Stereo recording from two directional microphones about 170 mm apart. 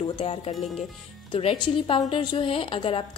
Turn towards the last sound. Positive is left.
turn(degrees=30)  # may be behind; listen again after turning